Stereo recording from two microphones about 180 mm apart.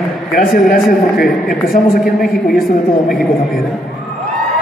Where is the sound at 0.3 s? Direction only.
55° left (ahead or behind).